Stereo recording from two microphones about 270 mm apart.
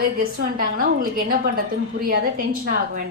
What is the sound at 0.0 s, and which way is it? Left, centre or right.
A woman's voice, right.